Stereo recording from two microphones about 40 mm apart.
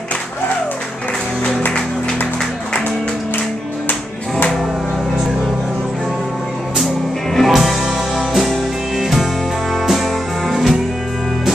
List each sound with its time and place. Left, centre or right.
7.3 s music: centre
7.6 s music: centre